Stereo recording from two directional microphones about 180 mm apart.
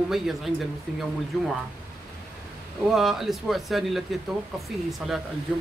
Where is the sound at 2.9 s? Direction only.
Centre (ahead or behind).